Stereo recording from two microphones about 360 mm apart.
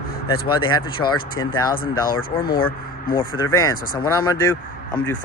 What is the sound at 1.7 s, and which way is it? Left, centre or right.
Speech, left.